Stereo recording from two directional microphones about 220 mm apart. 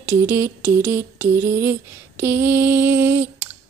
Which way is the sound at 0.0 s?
10° right (ahead or behind).